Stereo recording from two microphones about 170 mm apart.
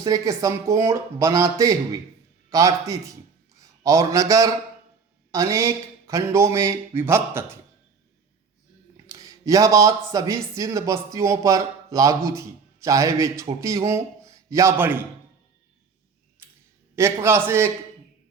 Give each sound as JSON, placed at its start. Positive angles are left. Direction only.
{"t": 0.0, "sound": "a man's voice", "side_deg": -20}
{"t": 9.0, "sound": "speech", "side_deg": -20}
{"t": 16.9, "sound": "speech", "side_deg": -15}